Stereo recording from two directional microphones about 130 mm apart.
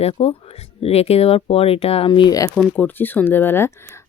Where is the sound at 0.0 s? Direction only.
50° left (ahead or behind); by 2.5 s 30° left (ahead or behind).